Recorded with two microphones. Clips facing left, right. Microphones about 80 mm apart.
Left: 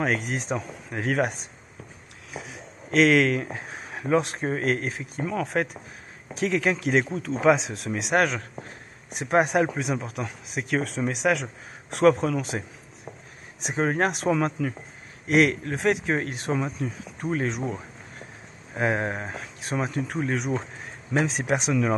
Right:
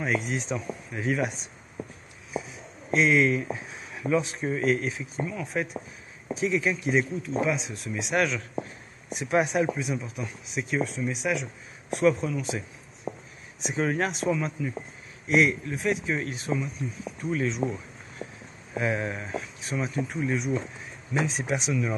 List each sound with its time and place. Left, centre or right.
0.0 s speech: left
2.3 s speech: left
5.2 s speech: left
7.2 s speech: left
11.9 s speech: left
13.7 s speech: left
14.1 s speech: left
16.2 s speech: left
17.2 s speech: left